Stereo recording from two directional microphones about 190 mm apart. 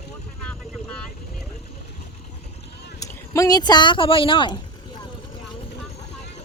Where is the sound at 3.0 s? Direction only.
15° left (ahead or behind).